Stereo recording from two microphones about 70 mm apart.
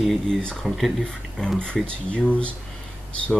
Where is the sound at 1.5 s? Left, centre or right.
Centre.